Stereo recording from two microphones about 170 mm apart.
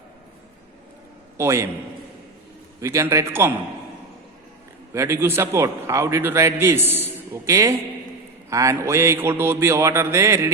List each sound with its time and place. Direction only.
1.4 s a man's voice: 15° right (ahead or behind)
2.8 s a man's voice: 20° right (ahead or behind)
4.9 s a man's voice: 15° right (ahead or behind)